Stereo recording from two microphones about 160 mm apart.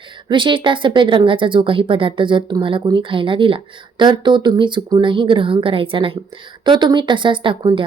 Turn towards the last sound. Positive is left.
turn(degrees=-30)  # may be behind; listen again after turning